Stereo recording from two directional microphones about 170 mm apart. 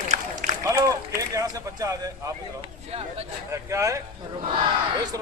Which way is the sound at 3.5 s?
20° right (ahead or behind).